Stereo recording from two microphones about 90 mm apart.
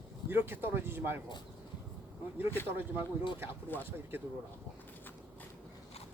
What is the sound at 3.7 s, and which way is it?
Speech, 20° left (ahead or behind).